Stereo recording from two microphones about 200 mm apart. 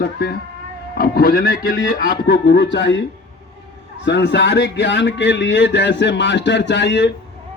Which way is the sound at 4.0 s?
60° left (ahead or behind).